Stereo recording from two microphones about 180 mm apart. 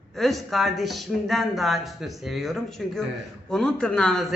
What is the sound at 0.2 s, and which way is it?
A man's voice, centre (ahead or behind).